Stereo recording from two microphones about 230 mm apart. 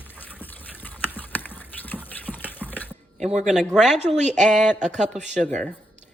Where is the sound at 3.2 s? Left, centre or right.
Right.